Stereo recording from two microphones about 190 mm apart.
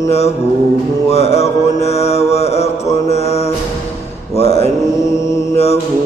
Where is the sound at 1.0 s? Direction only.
35° left (ahead or behind).